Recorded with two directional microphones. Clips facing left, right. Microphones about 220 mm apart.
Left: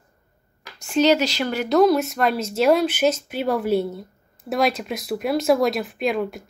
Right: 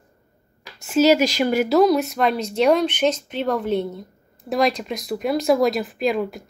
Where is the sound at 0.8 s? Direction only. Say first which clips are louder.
Right 2 dB; 5° right (ahead or behind).